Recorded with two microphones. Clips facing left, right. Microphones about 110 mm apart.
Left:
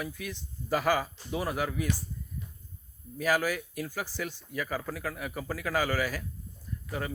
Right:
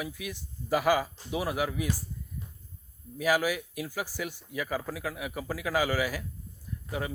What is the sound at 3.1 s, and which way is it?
Speech, 10° right (ahead or behind).